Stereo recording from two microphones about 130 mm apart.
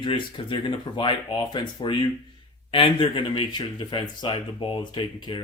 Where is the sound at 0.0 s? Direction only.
40° left (ahead or behind).